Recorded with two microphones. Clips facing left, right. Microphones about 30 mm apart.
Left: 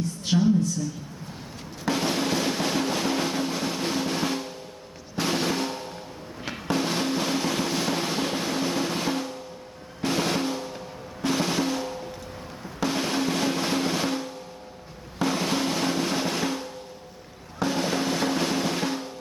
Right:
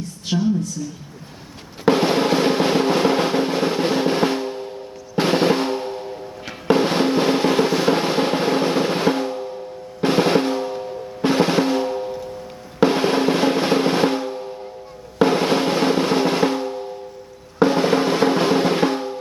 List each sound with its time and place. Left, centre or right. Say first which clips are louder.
0.3 s a woman's voice: right 1 dB; centre
1.8 s drum: right 9 dB; right